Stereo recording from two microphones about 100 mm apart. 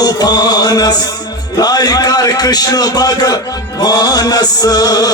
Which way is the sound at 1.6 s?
40° left (ahead or behind).